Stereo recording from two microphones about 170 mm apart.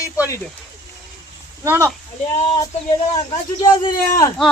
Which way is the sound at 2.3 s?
35° left (ahead or behind).